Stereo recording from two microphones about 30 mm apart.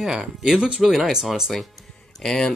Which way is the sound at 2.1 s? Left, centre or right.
Centre.